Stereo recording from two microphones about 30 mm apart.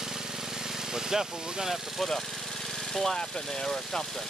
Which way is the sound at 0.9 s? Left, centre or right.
Centre.